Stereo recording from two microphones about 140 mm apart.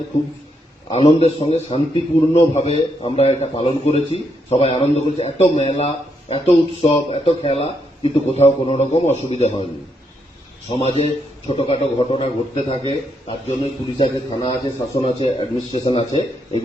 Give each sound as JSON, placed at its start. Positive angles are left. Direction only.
{"t": 0.9, "sound": "a man's voice", "side_deg": 40}
{"t": 10.7, "sound": "a man's voice", "side_deg": 45}